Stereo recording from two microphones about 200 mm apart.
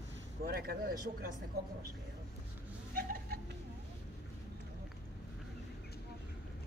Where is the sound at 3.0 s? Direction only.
50° right (ahead or behind).